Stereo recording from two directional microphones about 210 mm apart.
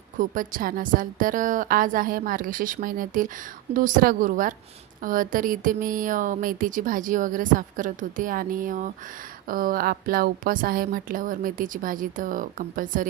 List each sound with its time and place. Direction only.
0.2 s a woman's voice: 40° right (ahead or behind)